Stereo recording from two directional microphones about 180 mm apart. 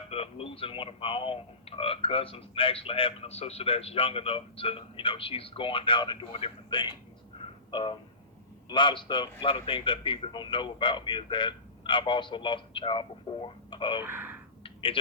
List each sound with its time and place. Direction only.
0.1 s a man's voice: 30° left (ahead or behind)
14.0 s speech: 10° right (ahead or behind)
14.6 s a sound: 30° left (ahead or behind)